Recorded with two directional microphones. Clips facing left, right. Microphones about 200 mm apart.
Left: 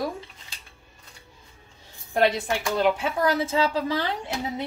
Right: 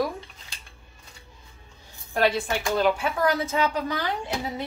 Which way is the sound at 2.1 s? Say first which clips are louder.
Left 1 dB; 20° left (ahead or behind).